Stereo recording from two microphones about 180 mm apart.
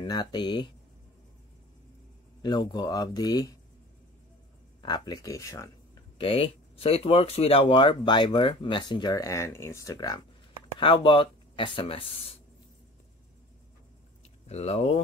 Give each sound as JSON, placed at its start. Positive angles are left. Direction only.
{"t": 0.0, "sound": "speech", "side_deg": 25}
{"t": 2.4, "sound": "speech", "side_deg": 25}
{"t": 4.8, "sound": "speech", "side_deg": 25}
{"t": 6.1, "sound": "speech", "side_deg": 30}
{"t": 14.5, "sound": "speech", "side_deg": 35}